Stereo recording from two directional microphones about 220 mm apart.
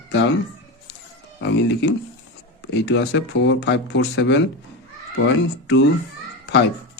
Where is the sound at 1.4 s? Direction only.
50° left (ahead or behind).